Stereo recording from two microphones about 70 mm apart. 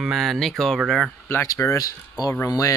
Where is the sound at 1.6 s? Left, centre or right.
Left.